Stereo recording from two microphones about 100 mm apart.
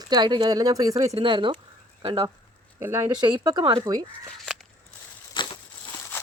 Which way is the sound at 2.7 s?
25° right (ahead or behind).